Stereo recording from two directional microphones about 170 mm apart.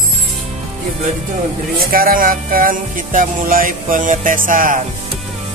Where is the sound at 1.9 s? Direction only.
55° right (ahead or behind).